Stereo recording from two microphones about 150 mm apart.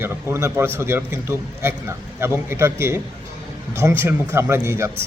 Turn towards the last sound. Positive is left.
turn(degrees=-15)  # may be behind; listen again after turning